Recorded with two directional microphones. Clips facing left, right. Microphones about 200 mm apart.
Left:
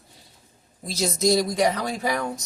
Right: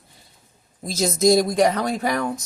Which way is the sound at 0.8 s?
45° right (ahead or behind).